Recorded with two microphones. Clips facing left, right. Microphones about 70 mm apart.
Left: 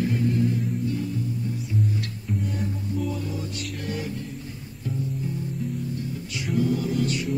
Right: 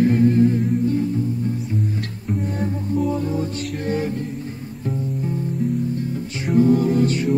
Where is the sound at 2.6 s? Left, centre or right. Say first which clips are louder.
Right 7 dB; right.